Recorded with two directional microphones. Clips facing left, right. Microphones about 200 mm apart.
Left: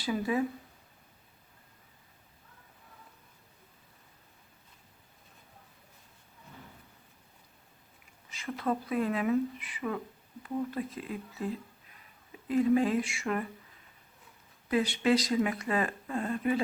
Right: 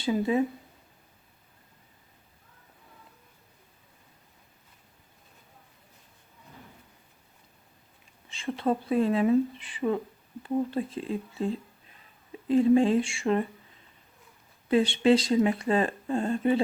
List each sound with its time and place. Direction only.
0.0 s speech: 25° right (ahead or behind)
8.3 s speech: 30° right (ahead or behind)
14.7 s speech: 30° right (ahead or behind)